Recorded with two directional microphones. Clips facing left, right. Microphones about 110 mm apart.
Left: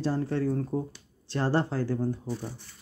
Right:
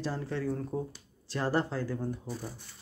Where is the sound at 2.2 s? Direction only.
10° right (ahead or behind).